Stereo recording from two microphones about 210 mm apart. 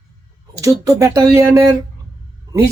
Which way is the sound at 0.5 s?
15° right (ahead or behind).